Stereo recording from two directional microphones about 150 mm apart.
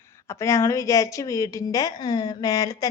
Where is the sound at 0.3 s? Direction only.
20° left (ahead or behind).